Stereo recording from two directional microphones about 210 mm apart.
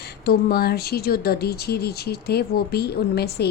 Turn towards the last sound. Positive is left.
turn(degrees=50)  # may be behind; listen again after turning